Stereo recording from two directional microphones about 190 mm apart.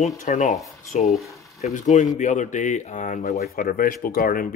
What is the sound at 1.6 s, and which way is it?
Speech, 40° left (ahead or behind).